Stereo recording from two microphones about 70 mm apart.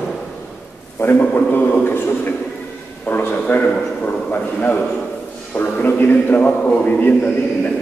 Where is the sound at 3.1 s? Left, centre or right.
Left.